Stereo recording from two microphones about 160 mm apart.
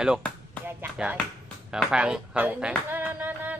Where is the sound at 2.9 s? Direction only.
10° right (ahead or behind).